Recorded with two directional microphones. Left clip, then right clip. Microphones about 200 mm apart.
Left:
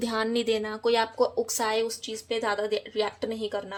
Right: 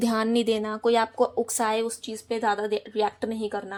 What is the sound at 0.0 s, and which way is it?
A woman's voice, 30° right (ahead or behind).